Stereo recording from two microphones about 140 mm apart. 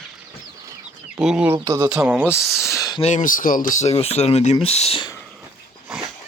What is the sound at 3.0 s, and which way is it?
Speech, 65° left (ahead or behind).